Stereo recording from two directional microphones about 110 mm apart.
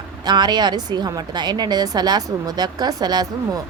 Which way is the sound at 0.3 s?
40° right (ahead or behind).